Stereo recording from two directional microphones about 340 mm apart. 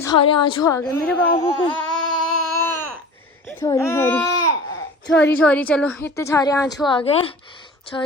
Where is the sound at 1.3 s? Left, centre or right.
Centre.